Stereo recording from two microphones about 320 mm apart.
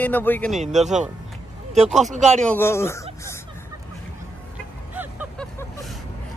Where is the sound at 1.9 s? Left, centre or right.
Centre.